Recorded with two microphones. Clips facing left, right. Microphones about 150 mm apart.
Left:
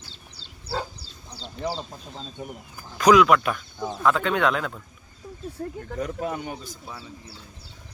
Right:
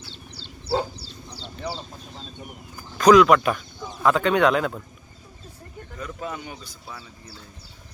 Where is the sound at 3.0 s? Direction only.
10° left (ahead or behind).